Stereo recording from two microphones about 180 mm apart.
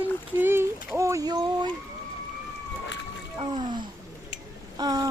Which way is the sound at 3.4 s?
30° right (ahead or behind).